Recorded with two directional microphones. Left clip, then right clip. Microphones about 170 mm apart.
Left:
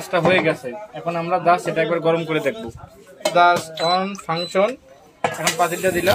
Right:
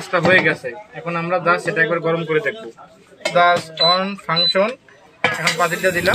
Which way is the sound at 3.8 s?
45° left (ahead or behind).